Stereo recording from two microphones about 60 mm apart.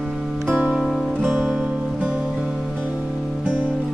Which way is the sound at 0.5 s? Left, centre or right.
Right.